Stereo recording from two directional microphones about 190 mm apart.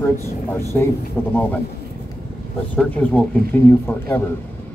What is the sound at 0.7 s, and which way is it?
Speech, 10° left (ahead or behind).